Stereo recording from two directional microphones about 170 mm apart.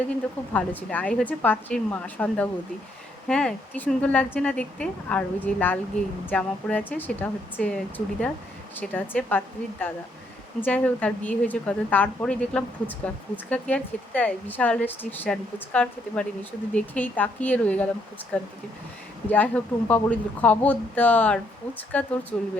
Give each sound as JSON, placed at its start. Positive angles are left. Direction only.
{"t": 0.5, "sound": "speech", "side_deg": 10}
{"t": 10.6, "sound": "speech", "side_deg": 10}